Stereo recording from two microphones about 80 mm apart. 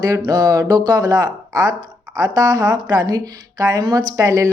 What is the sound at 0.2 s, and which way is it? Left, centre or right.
A woman's voice, right.